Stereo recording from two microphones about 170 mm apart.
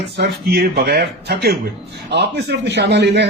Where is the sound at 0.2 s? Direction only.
70° right (ahead or behind).